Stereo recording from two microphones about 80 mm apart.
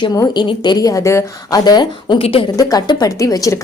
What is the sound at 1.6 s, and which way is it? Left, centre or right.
Speech, left.